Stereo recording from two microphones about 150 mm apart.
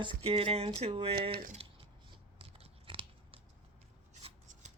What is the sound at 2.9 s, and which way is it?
Chewing, 35° right (ahead or behind).